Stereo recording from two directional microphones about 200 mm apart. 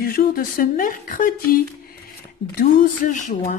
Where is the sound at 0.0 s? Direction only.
45° left (ahead or behind).